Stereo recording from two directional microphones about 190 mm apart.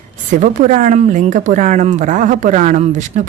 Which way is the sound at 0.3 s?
40° right (ahead or behind).